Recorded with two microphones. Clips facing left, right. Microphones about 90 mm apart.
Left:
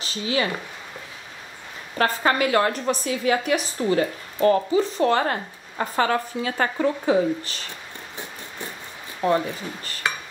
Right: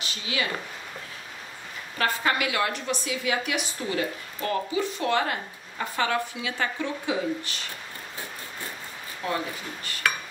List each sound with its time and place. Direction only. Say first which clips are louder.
0.0 s speech: left 6 dB; 35° left (ahead or behind)
2.0 s a woman's voice: left 5 dB; 40° left (ahead or behind)
9.2 s a woman's voice: left 9 dB; 35° left (ahead or behind)
10.0 s dishes: even; 20° left (ahead or behind)